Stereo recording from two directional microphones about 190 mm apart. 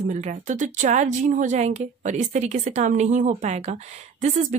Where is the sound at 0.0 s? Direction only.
40° right (ahead or behind).